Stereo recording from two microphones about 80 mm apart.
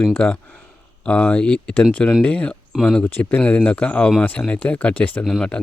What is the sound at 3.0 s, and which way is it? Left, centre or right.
Speech, left.